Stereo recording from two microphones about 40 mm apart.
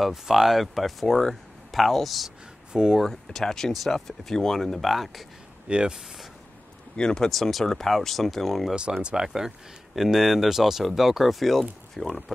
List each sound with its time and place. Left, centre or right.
0.0 s speech: centre
2.7 s speech: centre
3.3 s speech: centre
5.7 s speech: right
7.0 s speech: centre
7.2 s speech: centre
9.0 s speech: centre